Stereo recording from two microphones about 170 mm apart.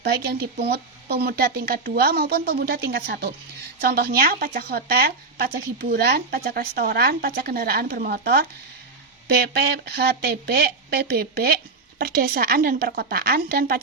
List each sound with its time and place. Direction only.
0.0 s speech: 70° right (ahead or behind)
9.9 s speech: 70° right (ahead or behind)